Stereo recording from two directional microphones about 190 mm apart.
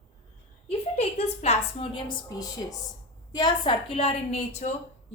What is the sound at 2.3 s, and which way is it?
A woman's voice, 20° left (ahead or behind).